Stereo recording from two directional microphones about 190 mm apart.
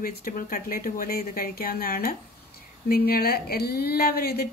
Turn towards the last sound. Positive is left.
turn(degrees=55)  # may be behind; listen again after turning